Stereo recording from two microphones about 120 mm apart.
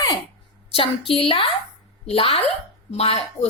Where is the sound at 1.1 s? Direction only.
50° left (ahead or behind).